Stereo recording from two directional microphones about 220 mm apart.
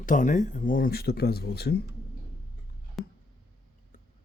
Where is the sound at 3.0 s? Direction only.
Centre (ahead or behind).